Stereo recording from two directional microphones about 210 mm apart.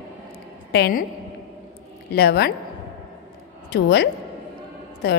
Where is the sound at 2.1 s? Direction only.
50° left (ahead or behind).